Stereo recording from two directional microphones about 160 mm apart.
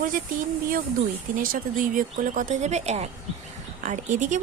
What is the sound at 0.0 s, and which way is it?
A woman's voice, 60° right (ahead or behind).